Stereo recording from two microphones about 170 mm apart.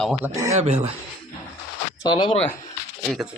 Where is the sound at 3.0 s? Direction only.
Centre (ahead or behind).